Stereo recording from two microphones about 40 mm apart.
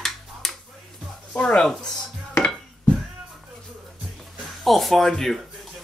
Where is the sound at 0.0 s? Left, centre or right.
Centre.